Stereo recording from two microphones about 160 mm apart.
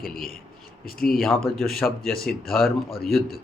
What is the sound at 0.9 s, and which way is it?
Speech, 65° left (ahead or behind).